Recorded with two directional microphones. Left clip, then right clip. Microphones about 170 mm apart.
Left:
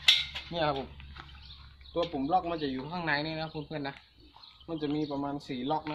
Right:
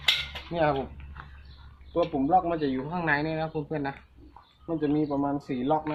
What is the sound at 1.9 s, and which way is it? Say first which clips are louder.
A man's voice: right 5 dB; 5° left (ahead or behind).